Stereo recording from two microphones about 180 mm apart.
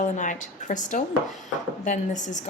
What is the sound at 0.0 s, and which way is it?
A woman's voice, 45° left (ahead or behind).